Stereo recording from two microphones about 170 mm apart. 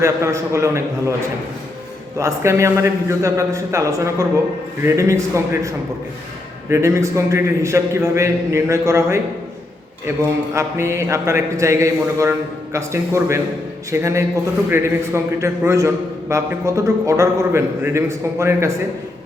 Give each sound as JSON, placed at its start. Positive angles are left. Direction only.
{"t": 0.0, "sound": "a man's voice", "side_deg": -15}
{"t": 2.1, "sound": "a man's voice", "side_deg": -15}
{"t": 10.2, "sound": "a man's voice", "side_deg": -15}